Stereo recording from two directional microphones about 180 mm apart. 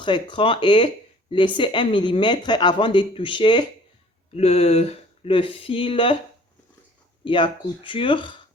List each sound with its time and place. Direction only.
0.0 s speech: 25° left (ahead or behind)
7.3 s speech: 25° left (ahead or behind)